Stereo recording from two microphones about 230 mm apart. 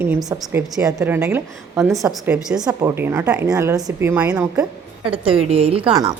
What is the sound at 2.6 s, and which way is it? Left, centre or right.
A woman's voice, centre.